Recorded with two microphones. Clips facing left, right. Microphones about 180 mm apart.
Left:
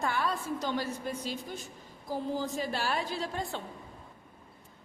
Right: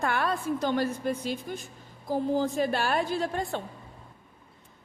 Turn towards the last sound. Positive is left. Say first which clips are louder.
# right 6 dB
turn(degrees=-55)  # may be behind; listen again after turning